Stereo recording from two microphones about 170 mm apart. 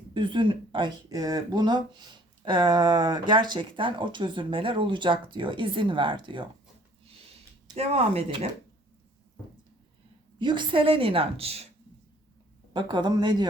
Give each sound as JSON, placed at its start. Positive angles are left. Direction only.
{"t": 0.1, "sound": "speech", "side_deg": -30}
{"t": 7.0, "sound": "a sound", "side_deg": -35}
{"t": 7.8, "sound": "a woman's voice", "side_deg": -35}
{"t": 10.3, "sound": "a woman's voice", "side_deg": -25}
{"t": 12.7, "sound": "speech", "side_deg": -25}